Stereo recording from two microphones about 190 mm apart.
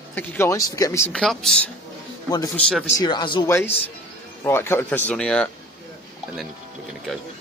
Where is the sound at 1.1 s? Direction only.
5° left (ahead or behind).